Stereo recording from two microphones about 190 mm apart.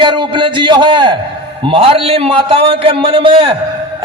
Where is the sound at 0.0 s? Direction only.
25° right (ahead or behind).